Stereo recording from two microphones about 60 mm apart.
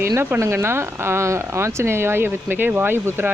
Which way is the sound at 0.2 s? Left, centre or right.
Right.